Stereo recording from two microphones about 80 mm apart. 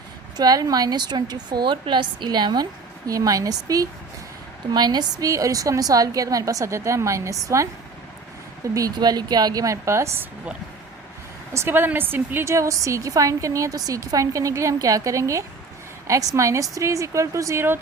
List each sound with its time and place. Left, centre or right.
0.3 s a woman's voice: right
3.1 s a woman's voice: right
4.7 s a woman's voice: right
5.3 s a woman's voice: right
9.0 s a woman's voice: right
11.5 s a woman's voice: right